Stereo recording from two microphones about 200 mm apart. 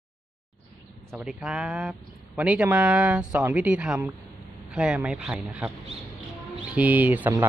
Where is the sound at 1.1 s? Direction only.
Centre (ahead or behind).